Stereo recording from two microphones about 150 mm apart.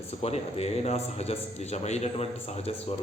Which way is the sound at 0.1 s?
45° left (ahead or behind).